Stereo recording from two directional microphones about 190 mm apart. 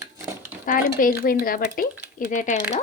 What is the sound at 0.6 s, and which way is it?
Speech, 45° left (ahead or behind).